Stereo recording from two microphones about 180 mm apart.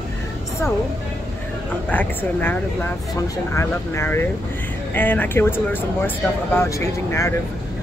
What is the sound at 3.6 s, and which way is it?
Speech, 15° left (ahead or behind).